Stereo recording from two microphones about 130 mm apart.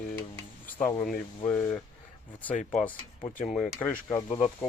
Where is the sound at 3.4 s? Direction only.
Centre (ahead or behind).